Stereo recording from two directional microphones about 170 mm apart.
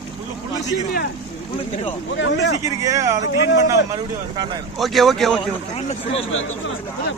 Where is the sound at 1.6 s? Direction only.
30° left (ahead or behind).